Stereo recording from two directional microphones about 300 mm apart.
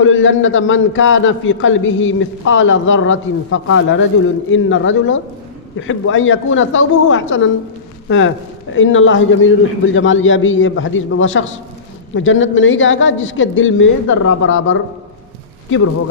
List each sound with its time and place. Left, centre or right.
0.0 s a man's voice: left